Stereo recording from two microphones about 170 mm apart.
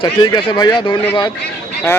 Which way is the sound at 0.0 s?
25° left (ahead or behind).